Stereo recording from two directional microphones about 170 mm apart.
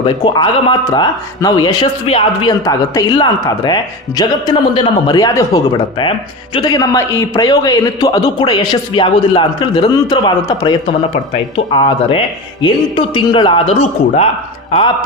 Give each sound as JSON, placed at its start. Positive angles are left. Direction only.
{"t": 0.0, "sound": "a man's voice", "side_deg": 30}